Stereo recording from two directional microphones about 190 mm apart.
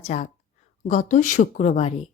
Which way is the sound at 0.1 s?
35° left (ahead or behind).